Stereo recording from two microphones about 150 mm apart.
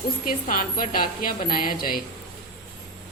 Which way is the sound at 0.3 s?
70° left (ahead or behind).